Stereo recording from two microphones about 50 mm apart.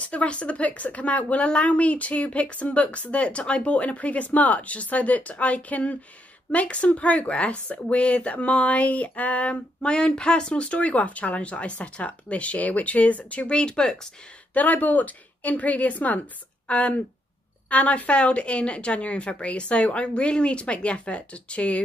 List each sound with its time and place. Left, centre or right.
0.0 s speech: left
14.5 s a woman's voice: left